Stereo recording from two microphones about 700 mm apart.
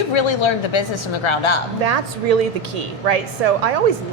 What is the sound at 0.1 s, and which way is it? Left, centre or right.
Speech, left.